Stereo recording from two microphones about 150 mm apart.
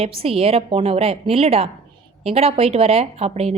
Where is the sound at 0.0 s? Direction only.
40° right (ahead or behind).